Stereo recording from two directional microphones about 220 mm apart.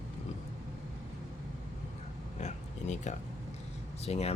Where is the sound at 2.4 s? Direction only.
30° left (ahead or behind).